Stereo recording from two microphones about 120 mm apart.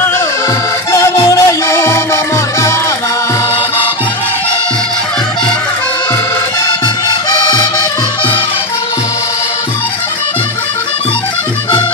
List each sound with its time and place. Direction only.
1.1 s music: 35° left (ahead or behind)
1.7 s music: 20° left (ahead or behind)
7.2 s music: 35° left (ahead or behind)